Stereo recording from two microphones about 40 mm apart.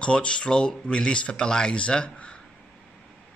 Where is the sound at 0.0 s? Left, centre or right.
Left.